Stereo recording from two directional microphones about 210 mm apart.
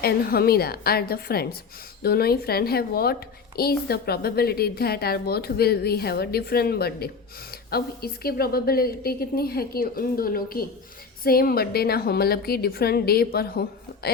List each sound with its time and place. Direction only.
0.0 s a woman's voice: 45° left (ahead or behind)